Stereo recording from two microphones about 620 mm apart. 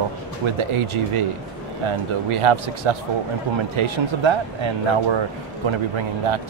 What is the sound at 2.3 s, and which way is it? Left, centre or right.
Speech, right.